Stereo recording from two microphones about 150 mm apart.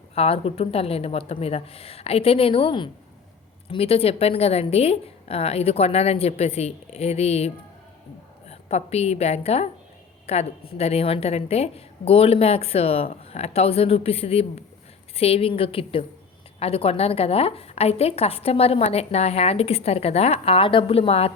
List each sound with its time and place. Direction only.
0.1 s a woman's voice: 40° left (ahead or behind)